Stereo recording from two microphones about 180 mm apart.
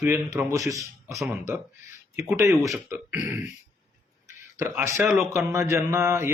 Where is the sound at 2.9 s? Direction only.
10° right (ahead or behind).